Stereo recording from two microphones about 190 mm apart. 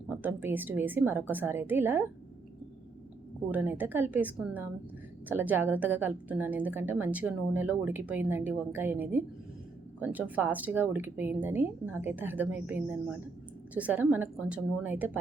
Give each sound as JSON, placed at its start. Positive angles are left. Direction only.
{"t": 0.1, "sound": "a woman's voice", "side_deg": -10}
{"t": 3.5, "sound": "a woman's voice", "side_deg": -10}